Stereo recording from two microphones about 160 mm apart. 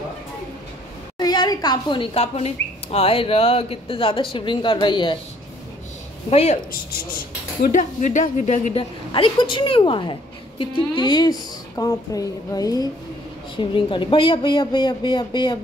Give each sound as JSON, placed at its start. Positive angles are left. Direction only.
{"t": 1.1, "sound": "speech", "side_deg": 25}
{"t": 6.3, "sound": "speech", "side_deg": 40}
{"t": 6.7, "sound": "speech", "side_deg": 65}
{"t": 9.1, "sound": "speech", "side_deg": 30}